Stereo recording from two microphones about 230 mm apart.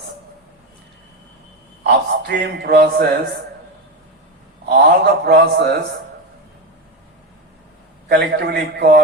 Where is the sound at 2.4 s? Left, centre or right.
Right.